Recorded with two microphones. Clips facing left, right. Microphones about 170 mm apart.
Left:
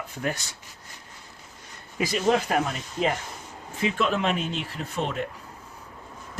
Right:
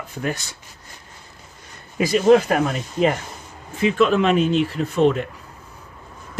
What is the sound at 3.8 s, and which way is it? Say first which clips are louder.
Speech: right 8 dB; 80° right.